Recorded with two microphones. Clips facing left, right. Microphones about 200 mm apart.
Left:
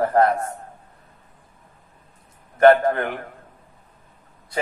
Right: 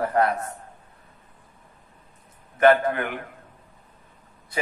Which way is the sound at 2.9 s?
35° left (ahead or behind).